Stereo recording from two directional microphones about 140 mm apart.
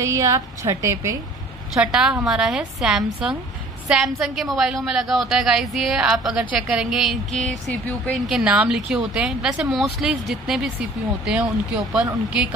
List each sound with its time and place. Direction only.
0.0 s a woman's voice: 20° right (ahead or behind)
1.7 s a woman's voice: 5° right (ahead or behind)
11.9 s a woman's voice: 5° right (ahead or behind)